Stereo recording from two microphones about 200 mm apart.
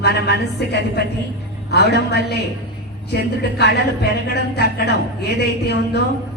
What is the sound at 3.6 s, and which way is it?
Speech, 55° left (ahead or behind).